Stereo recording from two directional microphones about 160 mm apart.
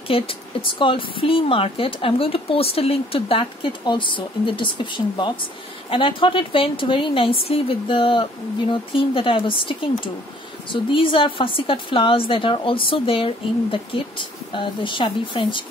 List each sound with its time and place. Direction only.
0.1 s a woman's voice: 35° left (ahead or behind)